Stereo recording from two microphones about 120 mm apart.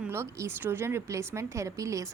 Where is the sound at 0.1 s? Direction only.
20° right (ahead or behind).